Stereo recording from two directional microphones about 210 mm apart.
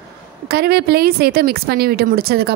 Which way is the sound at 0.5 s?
50° right (ahead or behind).